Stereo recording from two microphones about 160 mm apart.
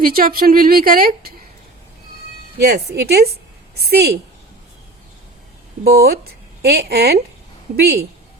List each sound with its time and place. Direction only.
0.0 s speech: 65° right (ahead or behind)
2.6 s a woman's voice: 90° right
5.8 s speech: 75° right (ahead or behind)
6.6 s a woman's voice: 85° right
7.8 s speech: 90° right